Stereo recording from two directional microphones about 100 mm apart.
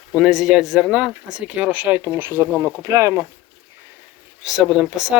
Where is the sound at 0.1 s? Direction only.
5° right (ahead or behind); by 3.2 s 30° right (ahead or behind).